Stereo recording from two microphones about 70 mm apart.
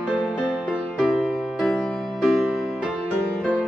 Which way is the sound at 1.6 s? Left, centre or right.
Centre.